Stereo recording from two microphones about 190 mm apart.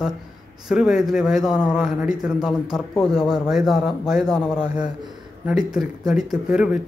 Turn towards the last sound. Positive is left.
turn(degrees=-5)  # may be behind; listen again after turning